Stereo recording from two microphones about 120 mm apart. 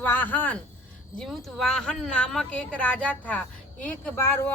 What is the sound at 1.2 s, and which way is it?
A woman's voice, centre (ahead or behind).